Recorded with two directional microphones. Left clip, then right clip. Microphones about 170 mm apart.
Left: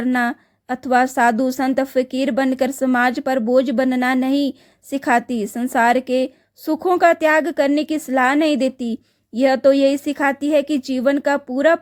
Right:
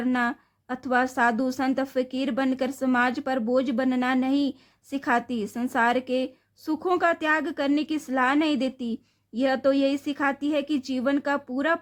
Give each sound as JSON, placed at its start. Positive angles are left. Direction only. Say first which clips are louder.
{"t": 0.0, "sound": "a woman's voice", "louder": "left 6 dB", "side_deg": 25}